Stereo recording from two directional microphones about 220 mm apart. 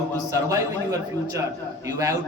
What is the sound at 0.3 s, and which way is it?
A man's voice, 15° right (ahead or behind).